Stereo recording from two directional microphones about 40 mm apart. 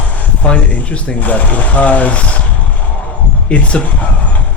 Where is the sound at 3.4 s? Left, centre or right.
Left.